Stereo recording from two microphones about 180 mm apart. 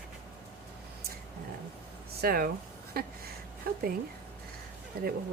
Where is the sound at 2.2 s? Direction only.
55° right (ahead or behind).